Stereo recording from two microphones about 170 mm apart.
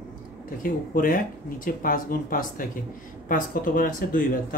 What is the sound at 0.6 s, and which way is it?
Speech, 55° left (ahead or behind).